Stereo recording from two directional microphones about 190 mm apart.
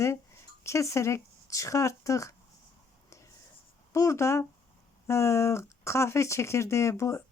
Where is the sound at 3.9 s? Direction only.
15° left (ahead or behind).